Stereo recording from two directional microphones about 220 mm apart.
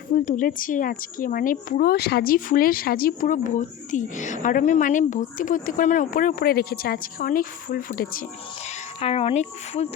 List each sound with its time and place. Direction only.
0.1 s a woman's voice: 40° left (ahead or behind)
9.0 s speech: 25° left (ahead or behind)